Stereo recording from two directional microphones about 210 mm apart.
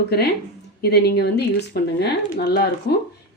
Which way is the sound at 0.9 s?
50° left (ahead or behind).